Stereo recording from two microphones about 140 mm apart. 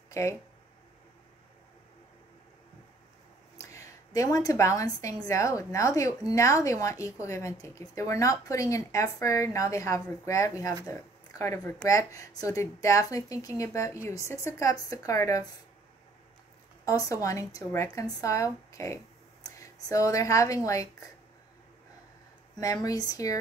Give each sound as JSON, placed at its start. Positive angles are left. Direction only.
{"t": 0.1, "sound": "speech", "side_deg": 20}
{"t": 3.5, "sound": "a woman's voice", "side_deg": 20}
{"t": 16.8, "sound": "a woman's voice", "side_deg": 25}
{"t": 22.6, "sound": "a woman's voice", "side_deg": 25}